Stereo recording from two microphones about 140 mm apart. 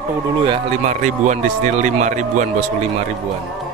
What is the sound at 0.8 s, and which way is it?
Speech, 55° right (ahead or behind).